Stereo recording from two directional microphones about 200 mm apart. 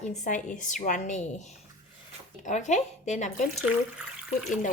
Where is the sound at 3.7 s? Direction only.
5° right (ahead or behind).